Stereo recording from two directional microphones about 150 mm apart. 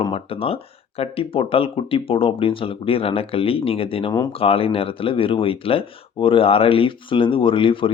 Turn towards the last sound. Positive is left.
turn(degrees=35)  # may be behind; listen again after turning